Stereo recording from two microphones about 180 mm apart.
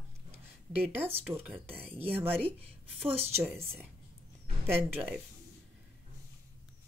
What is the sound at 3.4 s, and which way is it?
Speech, 15° right (ahead or behind).